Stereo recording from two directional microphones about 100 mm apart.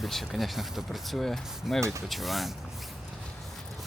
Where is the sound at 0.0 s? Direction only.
Centre (ahead or behind).